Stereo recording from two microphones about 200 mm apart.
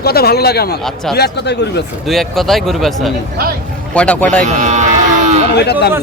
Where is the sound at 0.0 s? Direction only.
50° left (ahead or behind).